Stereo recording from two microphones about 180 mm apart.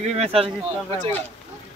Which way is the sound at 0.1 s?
35° right (ahead or behind).